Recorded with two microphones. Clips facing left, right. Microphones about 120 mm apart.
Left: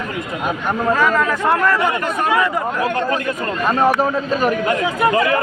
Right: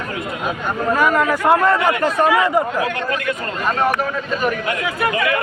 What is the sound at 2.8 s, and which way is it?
Speech, 35° left (ahead or behind).